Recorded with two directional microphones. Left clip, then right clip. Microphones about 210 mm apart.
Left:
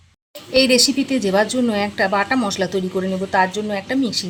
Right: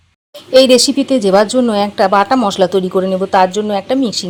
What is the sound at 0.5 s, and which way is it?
Speech, 30° right (ahead or behind).